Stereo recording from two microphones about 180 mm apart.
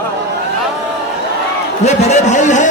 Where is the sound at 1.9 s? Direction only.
40° left (ahead or behind).